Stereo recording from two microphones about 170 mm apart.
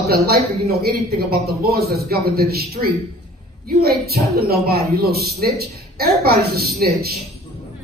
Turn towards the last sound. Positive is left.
turn(degrees=-65)  # may be behind; listen again after turning